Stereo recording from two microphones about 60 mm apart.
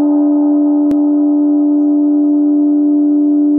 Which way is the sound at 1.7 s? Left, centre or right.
Centre.